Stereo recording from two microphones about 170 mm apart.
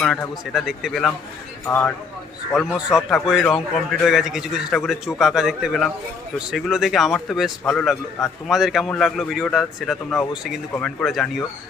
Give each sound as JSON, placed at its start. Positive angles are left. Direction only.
{"t": 0.0, "sound": "a man's voice", "side_deg": 0}
{"t": 1.6, "sound": "speech", "side_deg": 15}
{"t": 2.6, "sound": "a man's voice", "side_deg": 0}